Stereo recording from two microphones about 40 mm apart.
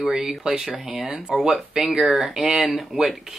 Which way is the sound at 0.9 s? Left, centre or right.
Centre.